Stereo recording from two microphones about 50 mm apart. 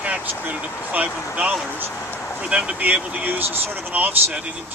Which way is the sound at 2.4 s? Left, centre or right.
Centre.